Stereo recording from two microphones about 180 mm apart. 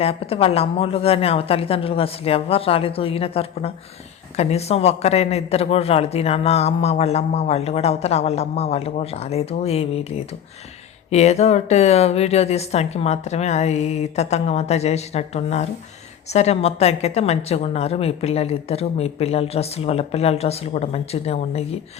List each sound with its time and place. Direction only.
0.0 s a man's voice: 35° left (ahead or behind)
11.1 s a man's voice: 40° left (ahead or behind)